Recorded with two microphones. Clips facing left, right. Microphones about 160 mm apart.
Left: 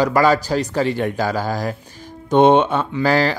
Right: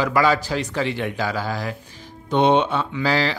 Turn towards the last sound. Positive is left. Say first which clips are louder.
# left 4 dB
turn(degrees=50)  # may be behind; listen again after turning